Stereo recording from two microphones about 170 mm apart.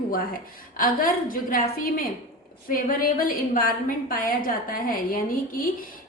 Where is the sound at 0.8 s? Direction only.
55° left (ahead or behind).